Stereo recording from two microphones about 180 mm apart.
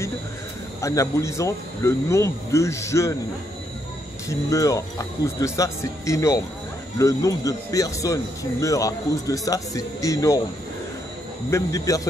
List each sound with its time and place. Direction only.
0.7 s speech: 15° left (ahead or behind)
4.3 s speech: 20° left (ahead or behind)
11.5 s speech: 20° left (ahead or behind)